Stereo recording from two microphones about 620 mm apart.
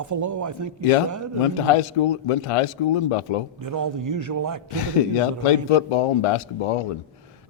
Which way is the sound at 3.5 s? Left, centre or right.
Right.